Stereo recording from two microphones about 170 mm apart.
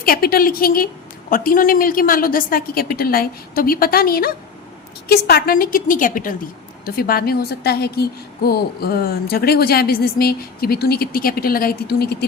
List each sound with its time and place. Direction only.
0.0 s a woman's voice: 60° left (ahead or behind)